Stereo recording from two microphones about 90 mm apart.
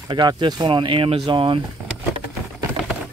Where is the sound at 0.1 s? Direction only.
55° right (ahead or behind).